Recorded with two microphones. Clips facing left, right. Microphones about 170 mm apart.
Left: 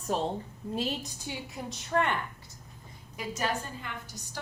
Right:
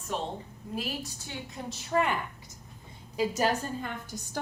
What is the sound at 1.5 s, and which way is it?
Speech, centre (ahead or behind).